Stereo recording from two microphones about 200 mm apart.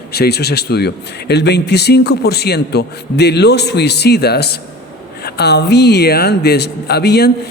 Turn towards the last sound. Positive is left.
turn(degrees=55)  # may be behind; listen again after turning